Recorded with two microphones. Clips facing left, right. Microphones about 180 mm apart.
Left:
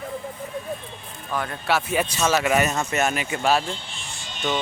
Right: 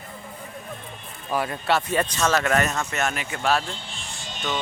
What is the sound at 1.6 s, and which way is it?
Speech, 5° left (ahead or behind).